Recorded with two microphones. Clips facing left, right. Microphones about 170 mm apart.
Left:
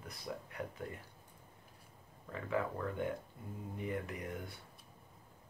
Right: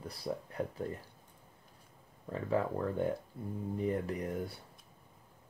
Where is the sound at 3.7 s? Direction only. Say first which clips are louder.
Right 6 dB; 35° right (ahead or behind).